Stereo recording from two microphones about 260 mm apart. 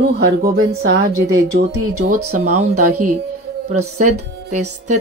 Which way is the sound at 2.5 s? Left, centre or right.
Right.